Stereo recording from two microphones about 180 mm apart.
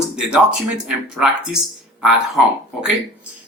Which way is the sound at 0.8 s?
5° right (ahead or behind).